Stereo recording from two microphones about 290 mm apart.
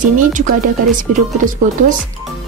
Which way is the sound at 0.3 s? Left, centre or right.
Right.